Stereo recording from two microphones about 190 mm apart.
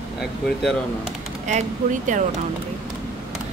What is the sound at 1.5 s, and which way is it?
Speech, 40° right (ahead or behind).